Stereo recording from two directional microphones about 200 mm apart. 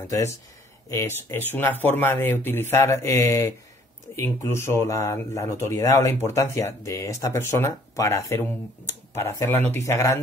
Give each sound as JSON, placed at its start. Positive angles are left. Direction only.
{"t": 0.0, "sound": "speech", "side_deg": 15}